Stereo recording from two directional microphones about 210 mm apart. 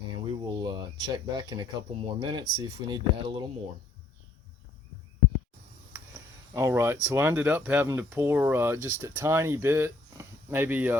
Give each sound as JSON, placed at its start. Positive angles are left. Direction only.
{"t": 0.3, "sound": "a sound", "side_deg": -20}
{"t": 2.0, "sound": "speech", "side_deg": -25}
{"t": 6.5, "sound": "speech", "side_deg": -15}